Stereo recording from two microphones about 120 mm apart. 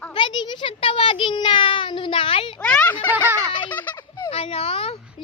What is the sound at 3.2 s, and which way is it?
Speech, 25° right (ahead or behind).